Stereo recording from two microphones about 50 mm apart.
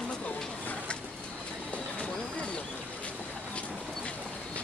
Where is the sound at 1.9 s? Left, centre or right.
Centre.